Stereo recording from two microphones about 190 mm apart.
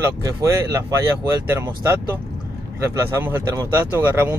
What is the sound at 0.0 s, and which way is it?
Speech, 15° right (ahead or behind).